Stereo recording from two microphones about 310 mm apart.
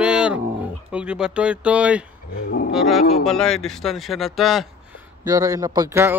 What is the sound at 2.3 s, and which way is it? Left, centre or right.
Roaring cats, left.